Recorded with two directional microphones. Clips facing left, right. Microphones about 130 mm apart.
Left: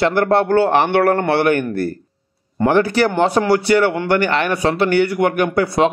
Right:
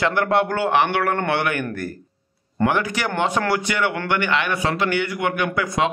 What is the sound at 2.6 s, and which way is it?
A man's voice, 35° left (ahead or behind).